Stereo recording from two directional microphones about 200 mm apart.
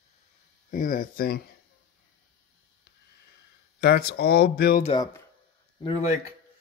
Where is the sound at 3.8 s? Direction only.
50° left (ahead or behind).